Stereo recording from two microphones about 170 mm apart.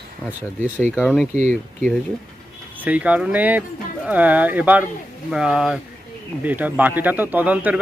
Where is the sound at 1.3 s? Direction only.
45° right (ahead or behind).